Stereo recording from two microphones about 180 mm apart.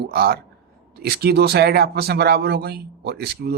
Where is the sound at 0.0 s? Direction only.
60° right (ahead or behind).